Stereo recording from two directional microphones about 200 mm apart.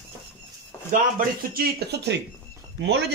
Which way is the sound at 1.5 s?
55° right (ahead or behind).